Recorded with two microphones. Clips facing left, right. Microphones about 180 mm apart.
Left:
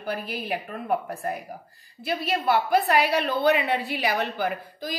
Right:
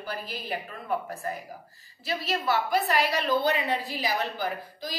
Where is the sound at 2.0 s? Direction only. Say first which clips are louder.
Left 4 dB; 55° left (ahead or behind).